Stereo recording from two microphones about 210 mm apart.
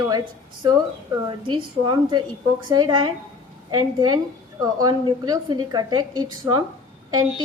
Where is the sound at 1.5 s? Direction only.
20° right (ahead or behind).